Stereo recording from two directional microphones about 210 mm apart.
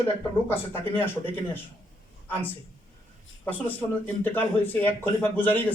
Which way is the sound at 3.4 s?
10° left (ahead or behind).